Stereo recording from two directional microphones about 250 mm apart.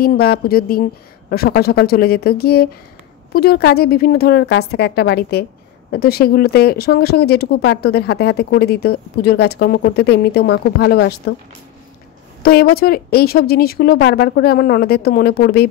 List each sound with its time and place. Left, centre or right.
0.0 s speech: left
12.4 s speech: left